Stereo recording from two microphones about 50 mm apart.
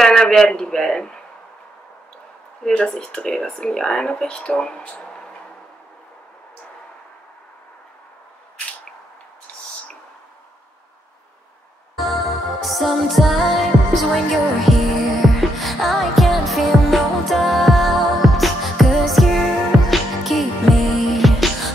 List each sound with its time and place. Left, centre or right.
0.0 s a man's voice: centre
2.6 s speech: centre
4.9 s a sound: centre
12.0 s music: centre